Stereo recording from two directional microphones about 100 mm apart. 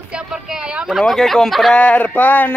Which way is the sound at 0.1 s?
5° right (ahead or behind).